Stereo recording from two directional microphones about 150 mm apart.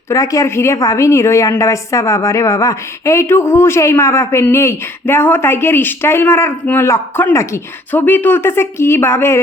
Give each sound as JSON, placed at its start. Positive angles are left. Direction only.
{"t": 0.1, "sound": "a woman's voice", "side_deg": 20}